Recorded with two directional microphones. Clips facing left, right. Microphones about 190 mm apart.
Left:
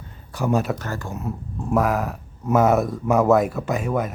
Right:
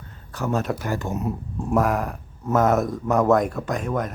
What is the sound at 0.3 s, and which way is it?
Speech, 10° left (ahead or behind).